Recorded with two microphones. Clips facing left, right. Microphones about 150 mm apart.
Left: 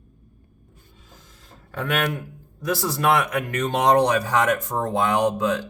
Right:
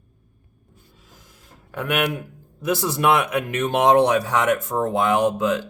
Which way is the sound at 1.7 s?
15° right (ahead or behind).